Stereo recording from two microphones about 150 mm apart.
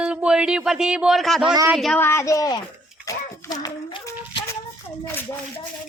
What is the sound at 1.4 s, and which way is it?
Speech, 25° right (ahead or behind).